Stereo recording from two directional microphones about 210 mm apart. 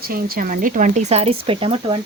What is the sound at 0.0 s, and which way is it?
Speech, 45° right (ahead or behind).